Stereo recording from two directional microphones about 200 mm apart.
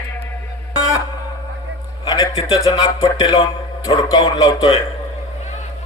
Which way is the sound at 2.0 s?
20° left (ahead or behind).